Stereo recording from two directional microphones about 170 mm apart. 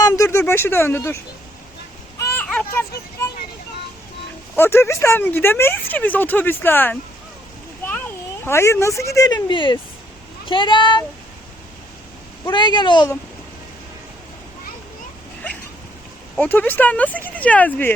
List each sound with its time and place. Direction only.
0.0 s speech: 20° left (ahead or behind)
2.2 s a sound: 10° left (ahead or behind)
4.5 s speech: 15° left (ahead or behind)
8.4 s speech: 15° left (ahead or behind)
12.5 s speech: 25° left (ahead or behind)
16.4 s speech: 10° left (ahead or behind)